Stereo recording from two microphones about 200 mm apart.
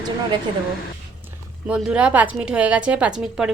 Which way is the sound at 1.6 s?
5° right (ahead or behind).